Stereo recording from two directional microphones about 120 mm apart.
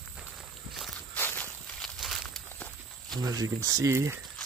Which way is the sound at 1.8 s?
Centre (ahead or behind).